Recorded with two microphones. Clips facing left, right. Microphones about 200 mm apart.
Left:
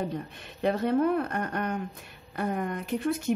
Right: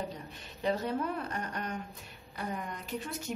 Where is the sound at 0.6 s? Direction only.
60° left (ahead or behind).